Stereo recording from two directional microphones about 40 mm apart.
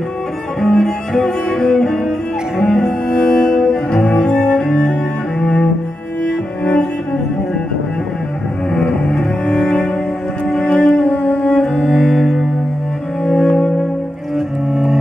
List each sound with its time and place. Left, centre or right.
0.6 s music: centre
2.6 s cello: centre
4.0 s cello: left
8.7 s double bass: centre
10.5 s music: centre
11.1 s cello: left
11.4 s cello: centre
11.9 s music: centre
13.2 s cello: centre
14.3 s cello: centre